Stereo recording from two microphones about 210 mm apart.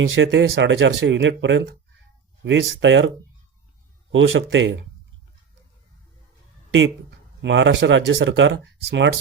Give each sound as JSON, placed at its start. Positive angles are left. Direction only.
{"t": 0.1, "sound": "speech", "side_deg": -65}
{"t": 4.1, "sound": "speech", "side_deg": -65}
{"t": 6.7, "sound": "speech", "side_deg": -60}